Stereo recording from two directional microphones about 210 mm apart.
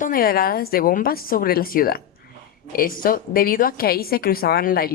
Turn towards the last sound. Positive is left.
turn(degrees=45)  # may be behind; listen again after turning